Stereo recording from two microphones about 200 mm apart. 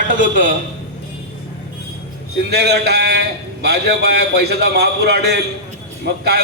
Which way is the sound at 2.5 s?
55° right (ahead or behind).